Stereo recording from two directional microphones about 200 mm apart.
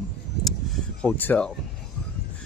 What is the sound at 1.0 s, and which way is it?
Speech, 10° left (ahead or behind).